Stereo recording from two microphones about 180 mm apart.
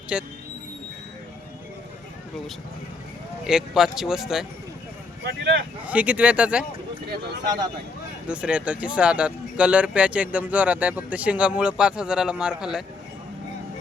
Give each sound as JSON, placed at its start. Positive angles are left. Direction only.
{"t": 0.1, "sound": "speech", "side_deg": -5}
{"t": 3.4, "sound": "speech", "side_deg": -5}
{"t": 5.2, "sound": "speech", "side_deg": -75}
{"t": 5.8, "sound": "speech", "side_deg": -10}
{"t": 8.3, "sound": "speech", "side_deg": -5}